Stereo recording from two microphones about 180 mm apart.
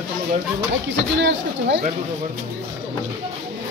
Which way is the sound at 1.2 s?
75° right (ahead or behind).